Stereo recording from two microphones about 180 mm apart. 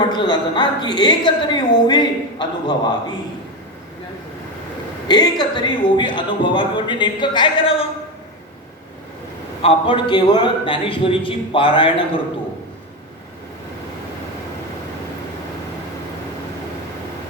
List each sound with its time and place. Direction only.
0.1 s a woman's voice: 25° left (ahead or behind)
5.0 s a woman's voice: 25° left (ahead or behind)
9.6 s a woman's voice: 30° left (ahead or behind)